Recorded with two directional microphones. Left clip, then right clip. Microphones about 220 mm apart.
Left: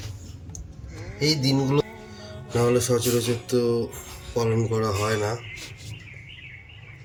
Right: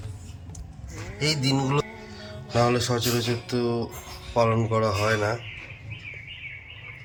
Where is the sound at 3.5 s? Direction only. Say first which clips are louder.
Left 4 dB; 5° right (ahead or behind).